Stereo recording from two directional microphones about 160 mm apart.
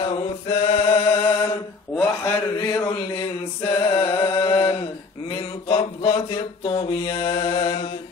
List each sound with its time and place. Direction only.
0.0 s mantra: 35° left (ahead or behind)